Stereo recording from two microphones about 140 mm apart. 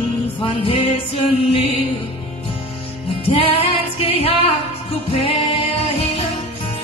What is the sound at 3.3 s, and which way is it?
Music, 40° left (ahead or behind).